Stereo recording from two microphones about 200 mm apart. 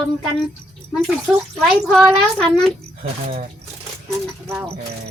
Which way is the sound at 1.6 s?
5° right (ahead or behind).